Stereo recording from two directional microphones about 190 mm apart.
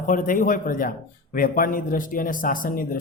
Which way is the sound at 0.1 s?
45° left (ahead or behind).